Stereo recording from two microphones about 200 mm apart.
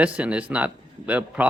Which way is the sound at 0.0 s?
5° right (ahead or behind).